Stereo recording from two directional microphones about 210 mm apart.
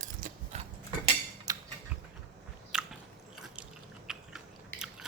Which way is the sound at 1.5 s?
15° right (ahead or behind).